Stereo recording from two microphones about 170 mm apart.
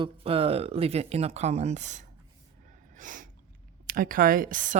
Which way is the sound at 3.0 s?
50° right (ahead or behind).